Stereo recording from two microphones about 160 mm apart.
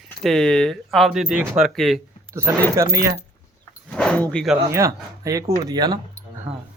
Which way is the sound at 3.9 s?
5° left (ahead or behind).